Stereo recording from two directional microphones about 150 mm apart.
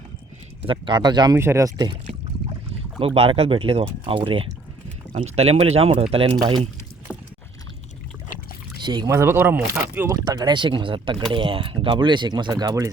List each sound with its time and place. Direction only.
0.6 s speech: 35° right (ahead or behind)
1.4 s speech: 20° right (ahead or behind)
3.0 s speech: 40° right (ahead or behind)
7.1 s rowboat: 10° right (ahead or behind)
8.8 s speech: 30° right (ahead or behind)
9.1 s speech: 15° right (ahead or behind)
10.2 s speech: 30° right (ahead or behind)